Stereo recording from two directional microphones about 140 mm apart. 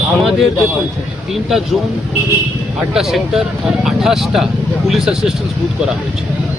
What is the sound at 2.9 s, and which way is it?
Speech, 5° right (ahead or behind).